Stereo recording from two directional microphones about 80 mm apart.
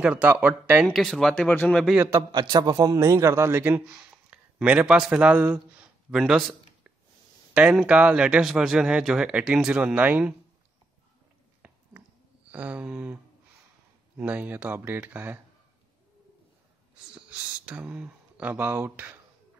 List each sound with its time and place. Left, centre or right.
0.0 s speech: centre
0.9 s speech: centre
2.0 s a man's voice: right
2.3 s a man's voice: right
3.0 s a man's voice: right
3.7 s a sound: centre
5.1 s speech: centre
5.4 s a sound: centre
6.1 s speech: centre; by 10.2 s right
11.6 s a sound: centre
12.4 s speech: centre
17.1 s speech: centre